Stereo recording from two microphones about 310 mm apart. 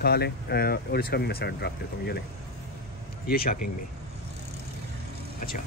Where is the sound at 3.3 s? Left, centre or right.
Left.